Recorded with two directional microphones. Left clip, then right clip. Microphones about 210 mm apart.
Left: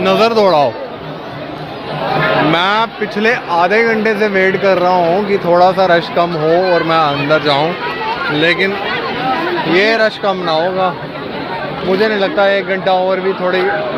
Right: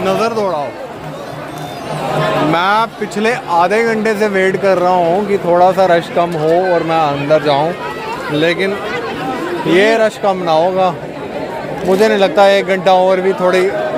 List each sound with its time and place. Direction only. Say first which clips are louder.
0.0 s a man's voice: left 4 dB; 15° left (ahead or behind)
0.4 s a man's voice: left 7 dB; 35° left (ahead or behind)
2.5 s speech: even; centre (ahead or behind)
9.7 s speech: right 2 dB; 15° right (ahead or behind)
11.9 s speech: right 3 dB; 20° right (ahead or behind)